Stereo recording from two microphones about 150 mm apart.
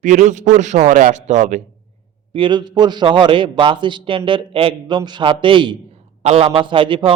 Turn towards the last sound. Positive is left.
turn(degrees=-35)  # may be behind; listen again after turning